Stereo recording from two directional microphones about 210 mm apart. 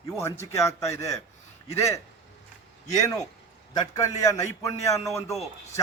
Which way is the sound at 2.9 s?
15° left (ahead or behind).